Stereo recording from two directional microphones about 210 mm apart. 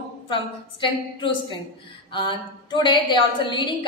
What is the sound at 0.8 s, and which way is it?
A woman's voice, 20° left (ahead or behind).